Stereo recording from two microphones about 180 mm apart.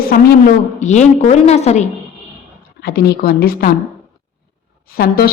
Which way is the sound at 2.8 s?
60° left (ahead or behind).